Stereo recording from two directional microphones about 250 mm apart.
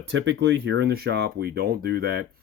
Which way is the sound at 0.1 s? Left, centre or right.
Right.